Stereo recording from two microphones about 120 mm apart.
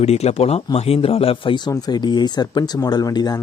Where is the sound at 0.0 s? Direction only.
60° left (ahead or behind).